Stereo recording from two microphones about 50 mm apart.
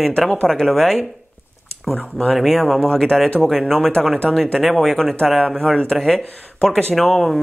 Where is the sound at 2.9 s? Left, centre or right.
Centre.